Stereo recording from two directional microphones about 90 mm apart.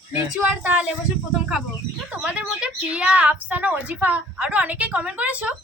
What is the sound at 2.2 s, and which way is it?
A woman's voice, 15° right (ahead or behind).